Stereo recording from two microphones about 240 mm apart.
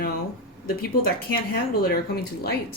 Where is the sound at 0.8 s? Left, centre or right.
Left.